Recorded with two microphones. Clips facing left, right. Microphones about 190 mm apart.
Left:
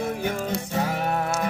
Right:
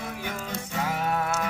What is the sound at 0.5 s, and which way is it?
Music, 35° left (ahead or behind).